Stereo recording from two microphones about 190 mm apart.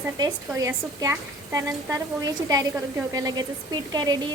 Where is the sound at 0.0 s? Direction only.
15° right (ahead or behind).